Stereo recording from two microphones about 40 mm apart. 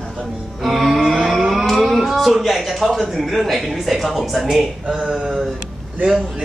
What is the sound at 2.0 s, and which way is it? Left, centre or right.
A man's voice, centre.